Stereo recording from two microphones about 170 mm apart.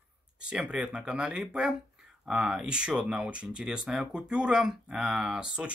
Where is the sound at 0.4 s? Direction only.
5° right (ahead or behind).